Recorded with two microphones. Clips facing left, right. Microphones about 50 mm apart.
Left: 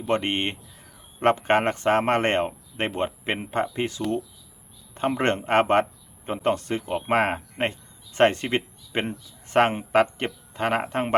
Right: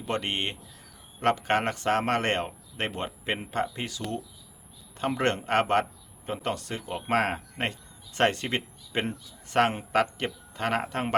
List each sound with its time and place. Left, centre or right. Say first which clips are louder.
0.1 s speech: left 5 dB; left